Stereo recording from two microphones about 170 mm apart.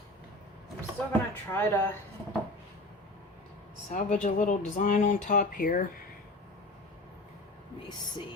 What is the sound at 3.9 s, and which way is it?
Speech, 50° left (ahead or behind).